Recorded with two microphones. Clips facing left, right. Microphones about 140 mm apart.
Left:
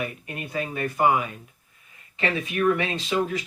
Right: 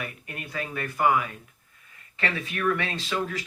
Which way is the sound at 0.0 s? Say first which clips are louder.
Left 5 dB; 25° left (ahead or behind).